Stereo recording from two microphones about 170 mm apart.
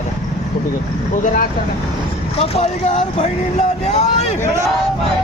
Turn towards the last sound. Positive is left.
turn(degrees=40)  # may be behind; listen again after turning